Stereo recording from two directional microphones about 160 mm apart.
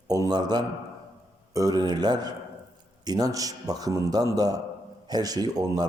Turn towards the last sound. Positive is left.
turn(degrees=-25)  # may be behind; listen again after turning